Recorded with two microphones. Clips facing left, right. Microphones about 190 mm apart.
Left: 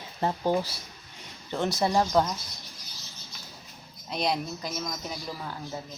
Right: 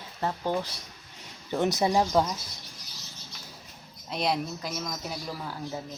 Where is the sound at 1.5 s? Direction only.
20° right (ahead or behind).